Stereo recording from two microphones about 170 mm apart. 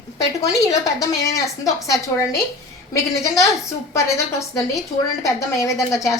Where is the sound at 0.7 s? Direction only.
20° left (ahead or behind).